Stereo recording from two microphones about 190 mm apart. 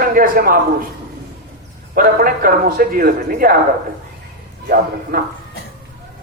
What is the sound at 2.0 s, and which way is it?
A man's voice, 45° right (ahead or behind).